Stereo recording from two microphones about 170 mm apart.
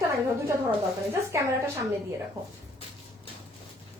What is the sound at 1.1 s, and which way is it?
Speech, 15° right (ahead or behind).